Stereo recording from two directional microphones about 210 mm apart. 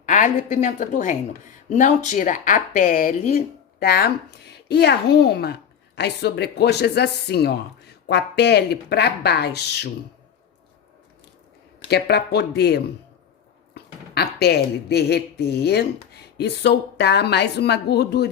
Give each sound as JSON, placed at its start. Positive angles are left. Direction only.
{"t": 0.0, "sound": "a woman's voice", "side_deg": 40}
{"t": 11.9, "sound": "speech", "side_deg": 50}